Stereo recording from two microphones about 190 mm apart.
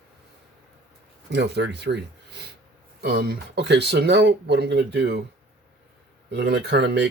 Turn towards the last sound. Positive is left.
turn(degrees=-65)  # may be behind; listen again after turning